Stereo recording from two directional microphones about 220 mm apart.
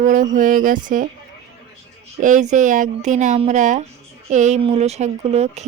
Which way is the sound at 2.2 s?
35° right (ahead or behind).